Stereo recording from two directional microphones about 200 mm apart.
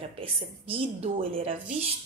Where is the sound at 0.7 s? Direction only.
30° right (ahead or behind).